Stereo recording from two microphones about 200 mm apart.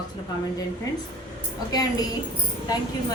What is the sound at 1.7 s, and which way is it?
Speech, 20° left (ahead or behind).